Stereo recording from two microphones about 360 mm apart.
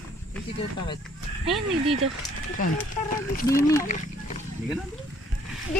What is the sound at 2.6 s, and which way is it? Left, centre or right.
Speech, left.